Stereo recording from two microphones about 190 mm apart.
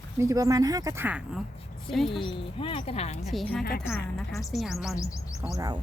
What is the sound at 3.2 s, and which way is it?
A woman's voice, centre (ahead or behind).